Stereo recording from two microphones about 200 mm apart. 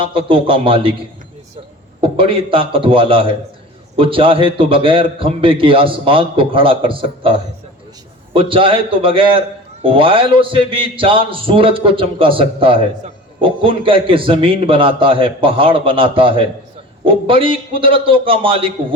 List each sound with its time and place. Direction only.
0.0 s a man's voice: 25° right (ahead or behind)
2.0 s a man's voice: 25° right (ahead or behind)